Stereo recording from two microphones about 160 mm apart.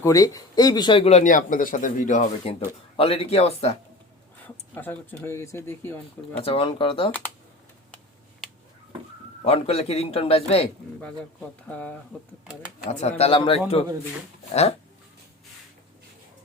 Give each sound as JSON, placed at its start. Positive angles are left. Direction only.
{"t": 0.0, "sound": "a man's voice", "side_deg": 20}
{"t": 4.7, "sound": "speech", "side_deg": 10}
{"t": 6.4, "sound": "a man's voice", "side_deg": 35}
{"t": 9.4, "sound": "a man's voice", "side_deg": 40}
{"t": 11.7, "sound": "speech", "side_deg": 10}
{"t": 12.8, "sound": "a man's voice", "side_deg": 45}